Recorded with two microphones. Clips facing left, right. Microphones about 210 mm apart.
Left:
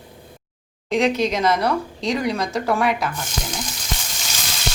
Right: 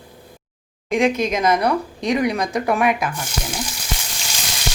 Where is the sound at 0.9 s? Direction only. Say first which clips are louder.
Right 1 dB; 10° right (ahead or behind).